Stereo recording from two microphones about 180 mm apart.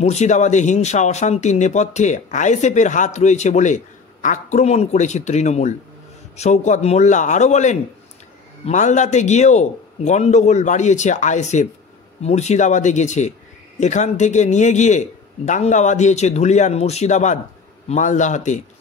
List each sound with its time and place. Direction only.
0.0 s speech: 40° left (ahead or behind)